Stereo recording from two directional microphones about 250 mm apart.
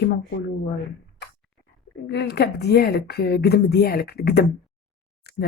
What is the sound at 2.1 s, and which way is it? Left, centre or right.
Speech, left.